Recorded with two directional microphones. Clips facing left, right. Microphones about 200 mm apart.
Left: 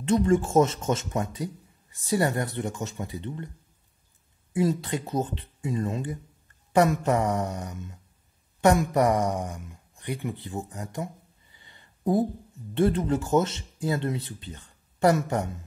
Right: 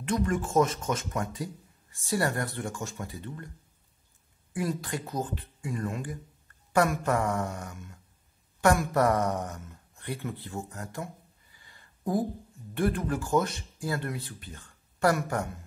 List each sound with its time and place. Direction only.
0.0 s speech: 25° left (ahead or behind)
4.6 s speech: 25° left (ahead or behind)
11.5 s a sound: 20° left (ahead or behind)
12.7 s speech: 25° left (ahead or behind)